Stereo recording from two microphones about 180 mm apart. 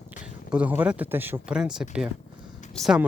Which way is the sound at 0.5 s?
10° right (ahead or behind).